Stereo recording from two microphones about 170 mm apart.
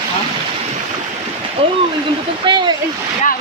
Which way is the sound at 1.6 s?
35° right (ahead or behind).